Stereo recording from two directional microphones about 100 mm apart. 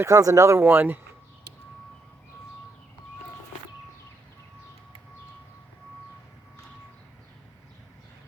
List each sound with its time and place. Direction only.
0.0 s speech: 35° right (ahead or behind)
0.6 s speech: 20° right (ahead or behind)